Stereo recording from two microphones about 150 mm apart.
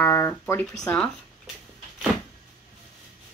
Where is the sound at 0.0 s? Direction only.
15° left (ahead or behind).